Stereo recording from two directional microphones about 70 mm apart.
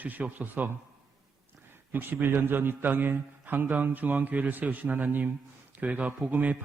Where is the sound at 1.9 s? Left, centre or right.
Right.